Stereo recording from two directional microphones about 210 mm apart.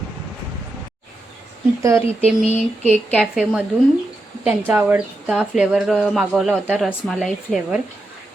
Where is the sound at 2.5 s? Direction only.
30° right (ahead or behind).